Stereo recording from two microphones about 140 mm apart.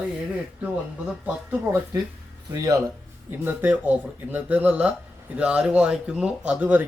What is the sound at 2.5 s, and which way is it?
Speech, 25° right (ahead or behind).